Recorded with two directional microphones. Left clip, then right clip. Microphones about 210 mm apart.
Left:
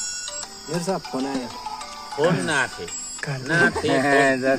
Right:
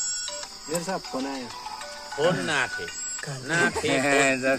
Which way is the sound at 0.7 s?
55° left (ahead or behind).